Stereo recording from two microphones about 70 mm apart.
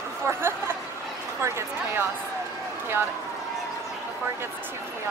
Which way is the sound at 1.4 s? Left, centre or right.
Right.